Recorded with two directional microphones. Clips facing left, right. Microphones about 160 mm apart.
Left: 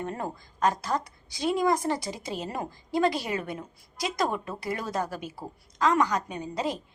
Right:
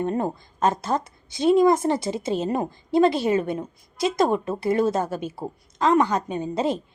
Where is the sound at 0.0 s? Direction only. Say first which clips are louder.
Right 8 dB; 25° right (ahead or behind).